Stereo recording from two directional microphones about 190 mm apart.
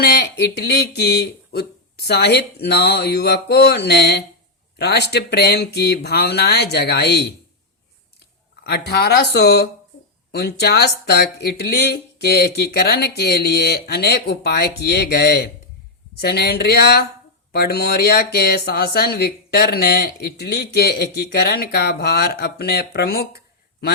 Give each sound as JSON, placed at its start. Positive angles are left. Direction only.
{"t": 0.0, "sound": "speech", "side_deg": 60}
{"t": 8.6, "sound": "speech", "side_deg": 60}